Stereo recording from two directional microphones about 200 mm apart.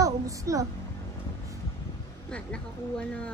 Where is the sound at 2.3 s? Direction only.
5° left (ahead or behind).